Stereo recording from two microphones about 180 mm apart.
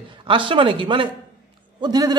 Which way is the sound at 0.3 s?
30° right (ahead or behind).